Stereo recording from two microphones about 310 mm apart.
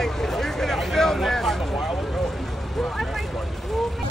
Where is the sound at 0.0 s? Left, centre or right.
Centre.